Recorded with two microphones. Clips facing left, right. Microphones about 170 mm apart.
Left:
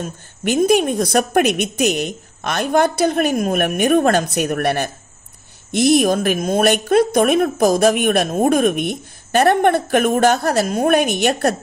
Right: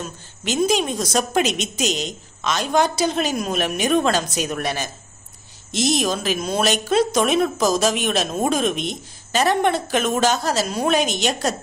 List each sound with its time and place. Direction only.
0.0 s a woman's voice: 50° left (ahead or behind)